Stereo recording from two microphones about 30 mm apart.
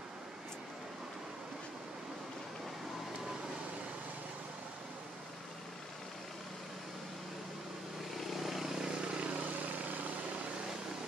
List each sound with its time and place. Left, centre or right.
8.3 s vehicle: centre
9.0 s vehicle: right
9.4 s a sound: right